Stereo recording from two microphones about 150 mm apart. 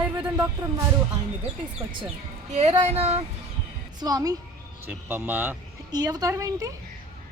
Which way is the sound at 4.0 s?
25° right (ahead or behind).